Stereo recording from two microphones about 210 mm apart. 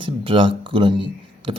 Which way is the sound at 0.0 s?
25° right (ahead or behind).